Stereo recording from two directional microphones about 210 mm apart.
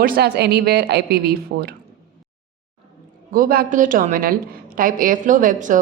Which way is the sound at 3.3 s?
45° right (ahead or behind).